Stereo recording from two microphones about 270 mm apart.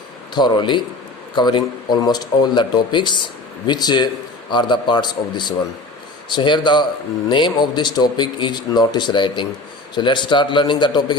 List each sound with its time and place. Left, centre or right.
0.3 s a man's voice: centre